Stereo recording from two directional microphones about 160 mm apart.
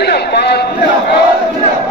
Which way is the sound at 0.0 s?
90° left.